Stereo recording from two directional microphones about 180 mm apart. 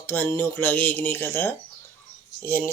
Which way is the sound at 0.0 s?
10° left (ahead or behind).